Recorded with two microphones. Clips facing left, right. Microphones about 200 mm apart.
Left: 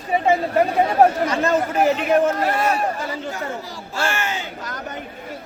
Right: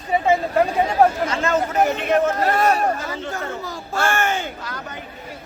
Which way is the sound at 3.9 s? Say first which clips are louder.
Right 3 dB; 50° right (ahead or behind).